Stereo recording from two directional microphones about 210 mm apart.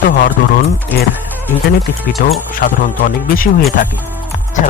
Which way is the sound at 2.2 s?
40° left (ahead or behind).